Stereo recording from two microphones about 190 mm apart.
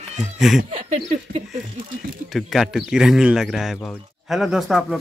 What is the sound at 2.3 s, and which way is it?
Speech, centre (ahead or behind).